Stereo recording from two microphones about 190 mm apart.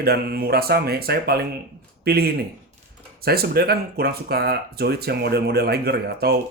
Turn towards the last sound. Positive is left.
turn(degrees=-55)  # may be behind; listen again after turning